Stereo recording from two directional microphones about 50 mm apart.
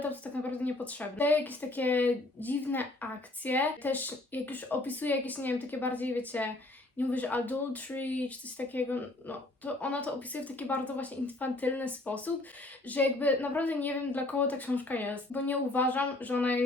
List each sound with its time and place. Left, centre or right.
0.6 s speech: left